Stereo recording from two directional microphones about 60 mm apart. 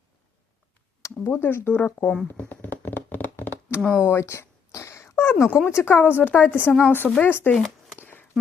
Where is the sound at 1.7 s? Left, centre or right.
Left.